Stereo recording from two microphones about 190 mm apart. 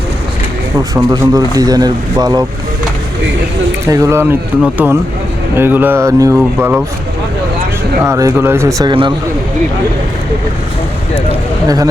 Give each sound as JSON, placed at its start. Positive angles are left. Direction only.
{"t": 1.1, "sound": "a man's voice", "side_deg": -20}
{"t": 3.8, "sound": "speech", "side_deg": -15}
{"t": 8.0, "sound": "speech", "side_deg": -15}